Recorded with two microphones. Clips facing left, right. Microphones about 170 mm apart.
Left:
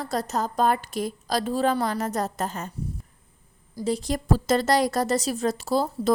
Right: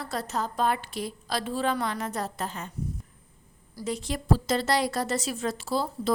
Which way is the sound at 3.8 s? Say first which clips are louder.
Left 5 dB; 35° left (ahead or behind).